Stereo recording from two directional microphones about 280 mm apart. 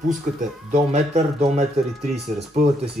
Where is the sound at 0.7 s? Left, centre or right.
Right.